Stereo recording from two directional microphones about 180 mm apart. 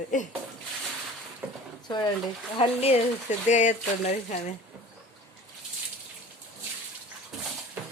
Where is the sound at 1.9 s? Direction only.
25° left (ahead or behind).